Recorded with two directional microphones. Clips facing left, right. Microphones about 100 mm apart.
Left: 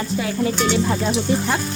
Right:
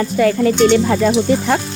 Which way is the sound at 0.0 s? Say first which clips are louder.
Right 8 dB; 60° right (ahead or behind).